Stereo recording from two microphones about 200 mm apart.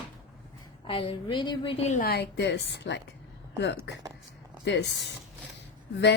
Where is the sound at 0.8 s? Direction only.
25° left (ahead or behind).